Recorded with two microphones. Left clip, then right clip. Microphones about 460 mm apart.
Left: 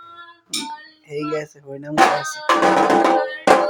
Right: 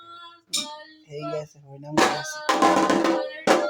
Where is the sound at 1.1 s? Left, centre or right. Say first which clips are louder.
Left 7 dB; right.